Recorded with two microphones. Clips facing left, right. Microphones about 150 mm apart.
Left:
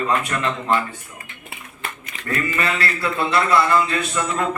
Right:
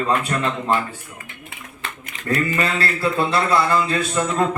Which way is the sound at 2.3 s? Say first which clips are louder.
Right 2 dB; 35° right (ahead or behind).